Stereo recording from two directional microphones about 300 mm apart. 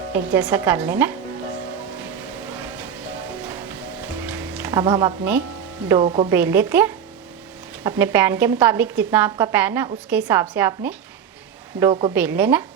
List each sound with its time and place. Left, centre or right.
0.1 s a woman's voice: centre
2.5 s a sound: centre
3.4 s music: centre
6.0 s speech: centre
6.2 s a woman's voice: centre
12.1 s a woman's voice: centre